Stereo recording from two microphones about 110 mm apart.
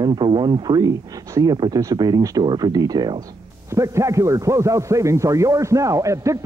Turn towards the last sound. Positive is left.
turn(degrees=-30)  # may be behind; listen again after turning